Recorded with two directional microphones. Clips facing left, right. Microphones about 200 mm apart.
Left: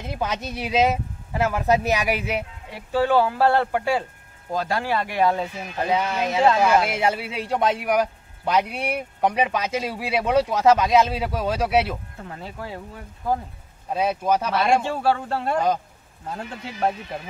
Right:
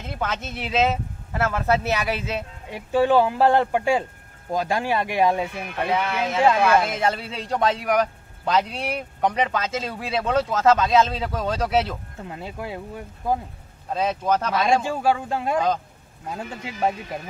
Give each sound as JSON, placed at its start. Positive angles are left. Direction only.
{"t": 0.0, "sound": "speech", "side_deg": 15}
{"t": 2.7, "sound": "speech", "side_deg": -15}
{"t": 5.5, "sound": "speech", "side_deg": -60}
{"t": 5.9, "sound": "speech", "side_deg": 15}
{"t": 12.3, "sound": "speech", "side_deg": -15}
{"t": 13.8, "sound": "speech", "side_deg": 10}
{"t": 14.8, "sound": "speech", "side_deg": -5}